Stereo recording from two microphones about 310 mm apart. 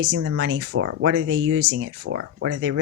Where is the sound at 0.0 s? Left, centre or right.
Right.